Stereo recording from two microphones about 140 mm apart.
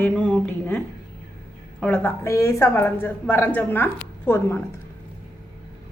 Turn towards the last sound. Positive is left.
turn(degrees=15)  # may be behind; listen again after turning